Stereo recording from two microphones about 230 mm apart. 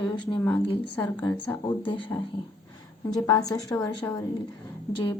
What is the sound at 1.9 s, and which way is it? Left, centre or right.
A woman's voice, left.